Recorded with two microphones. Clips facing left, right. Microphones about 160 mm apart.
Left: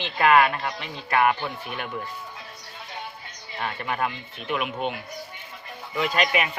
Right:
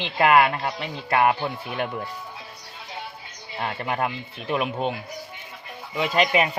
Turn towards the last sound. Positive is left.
turn(degrees=-25)  # may be behind; listen again after turning